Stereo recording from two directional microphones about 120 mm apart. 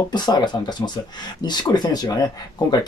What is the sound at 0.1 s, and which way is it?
Speech, 35° left (ahead or behind).